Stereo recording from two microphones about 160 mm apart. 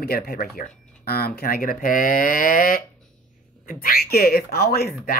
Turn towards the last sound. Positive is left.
turn(degrees=75)  # may be behind; listen again after turning